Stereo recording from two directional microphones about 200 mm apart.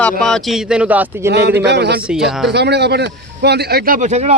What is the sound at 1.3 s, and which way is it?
Speech, 55° right (ahead or behind).